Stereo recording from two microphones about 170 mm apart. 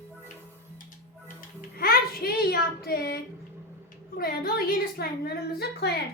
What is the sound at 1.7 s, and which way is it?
A woman's voice, 65° left (ahead or behind).